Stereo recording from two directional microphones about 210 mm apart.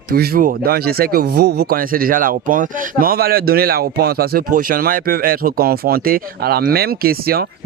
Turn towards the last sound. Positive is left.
turn(degrees=-45)  # may be behind; listen again after turning